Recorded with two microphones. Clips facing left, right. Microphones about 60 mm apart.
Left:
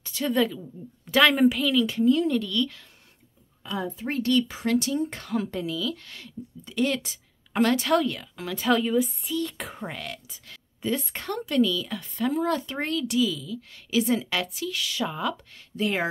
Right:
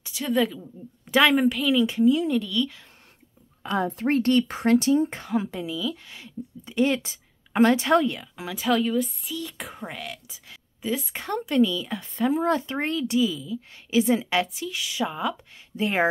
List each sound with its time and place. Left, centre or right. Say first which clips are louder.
0.0 s a woman's voice: even; centre
1.7 s speech: right 2 dB; centre
3.6 s speech: right 6 dB; right
4.1 s speech: right 2 dB; right
4.6 s a woman's voice: right 5 dB; right; by 11.2 s centre
11.2 s speech: right 2 dB; right
15.7 s speech: right 3 dB; right